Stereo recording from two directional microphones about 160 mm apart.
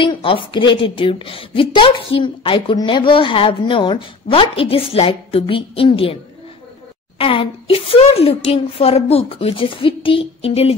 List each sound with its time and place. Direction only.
0.0 s a woman's voice: 35° left (ahead or behind)
7.2 s a woman's voice: 35° left (ahead or behind)